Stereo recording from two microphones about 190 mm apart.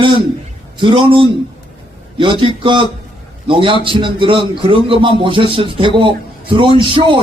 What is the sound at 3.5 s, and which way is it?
A man's voice, 25° right (ahead or behind).